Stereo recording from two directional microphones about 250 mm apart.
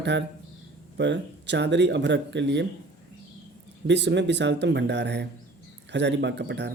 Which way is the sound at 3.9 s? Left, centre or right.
Right.